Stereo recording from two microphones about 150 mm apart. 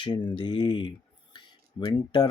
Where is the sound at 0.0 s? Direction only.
30° left (ahead or behind).